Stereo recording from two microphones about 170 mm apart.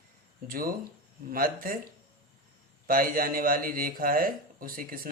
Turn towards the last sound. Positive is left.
turn(degrees=-55)  # may be behind; listen again after turning